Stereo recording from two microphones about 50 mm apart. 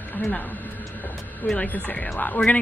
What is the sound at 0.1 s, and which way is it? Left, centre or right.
Speech, left.